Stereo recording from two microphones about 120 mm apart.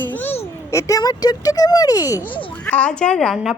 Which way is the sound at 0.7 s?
25° left (ahead or behind).